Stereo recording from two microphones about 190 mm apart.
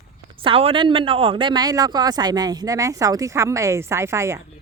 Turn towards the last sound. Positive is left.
turn(degrees=-15)  # may be behind; listen again after turning